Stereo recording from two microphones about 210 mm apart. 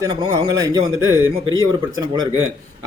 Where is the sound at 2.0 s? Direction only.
20° right (ahead or behind).